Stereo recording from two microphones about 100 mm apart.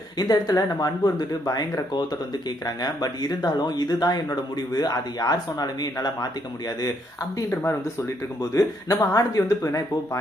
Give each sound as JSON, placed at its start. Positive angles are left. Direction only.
{"t": 0.2, "sound": "speech", "side_deg": 40}
{"t": 7.3, "sound": "speech", "side_deg": 25}